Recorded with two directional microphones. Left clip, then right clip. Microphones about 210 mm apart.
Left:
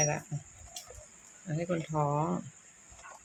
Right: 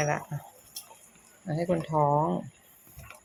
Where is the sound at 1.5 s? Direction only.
15° right (ahead or behind).